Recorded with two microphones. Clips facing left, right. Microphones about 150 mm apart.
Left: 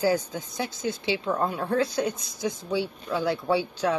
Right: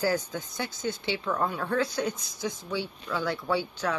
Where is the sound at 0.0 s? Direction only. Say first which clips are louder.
Left 3 dB; 15° left (ahead or behind).